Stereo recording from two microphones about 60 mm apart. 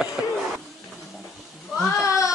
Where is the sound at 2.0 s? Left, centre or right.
Left.